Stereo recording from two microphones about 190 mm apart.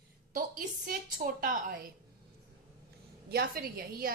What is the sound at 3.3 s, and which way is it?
Speech, 55° right (ahead or behind).